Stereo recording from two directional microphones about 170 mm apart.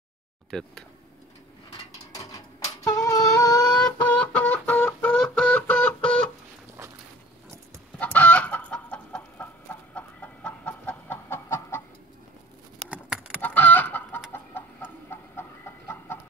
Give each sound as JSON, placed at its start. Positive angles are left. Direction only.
{"t": 0.5, "sound": "speech", "side_deg": 5}
{"t": 2.1, "sound": "a sound", "side_deg": 20}
{"t": 4.0, "sound": "music", "side_deg": 10}
{"t": 8.0, "sound": "chicken", "side_deg": 10}
{"t": 12.9, "sound": "keys jangling", "side_deg": -10}
{"t": 13.4, "sound": "chicken", "side_deg": 10}